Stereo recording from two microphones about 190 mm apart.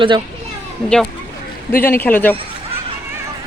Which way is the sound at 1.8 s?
10° left (ahead or behind).